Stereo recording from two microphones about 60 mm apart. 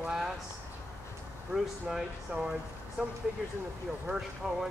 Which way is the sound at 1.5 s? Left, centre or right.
Centre.